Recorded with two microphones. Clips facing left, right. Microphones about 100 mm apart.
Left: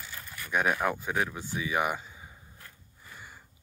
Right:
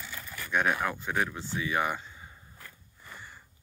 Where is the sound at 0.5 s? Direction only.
10° left (ahead or behind).